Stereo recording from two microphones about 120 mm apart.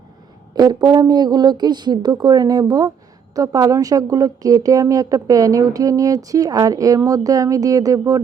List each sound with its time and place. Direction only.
0.5 s a woman's voice: 35° right (ahead or behind)